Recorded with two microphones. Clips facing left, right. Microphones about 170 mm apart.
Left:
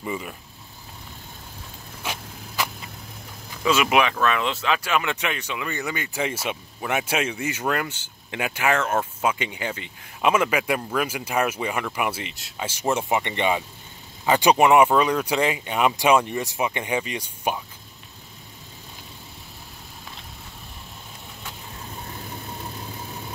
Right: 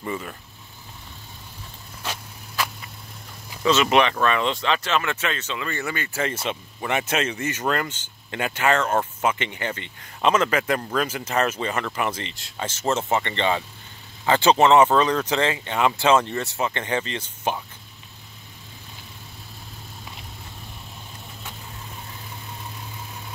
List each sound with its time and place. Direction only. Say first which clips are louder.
0.0 s speech: even; 10° left (ahead or behind)
2.0 s vehicle: left 1 dB; 15° left (ahead or behind)
3.6 s speech: right 1 dB; 10° left (ahead or behind)